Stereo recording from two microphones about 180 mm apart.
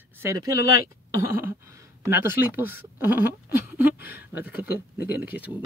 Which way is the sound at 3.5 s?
10° right (ahead or behind).